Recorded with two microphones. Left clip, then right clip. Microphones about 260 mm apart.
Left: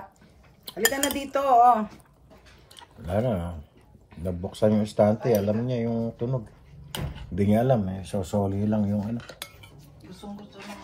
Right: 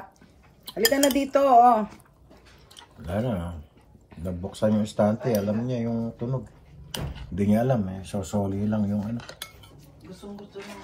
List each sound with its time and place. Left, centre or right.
1.1 s dishes: right
3.1 s speech: left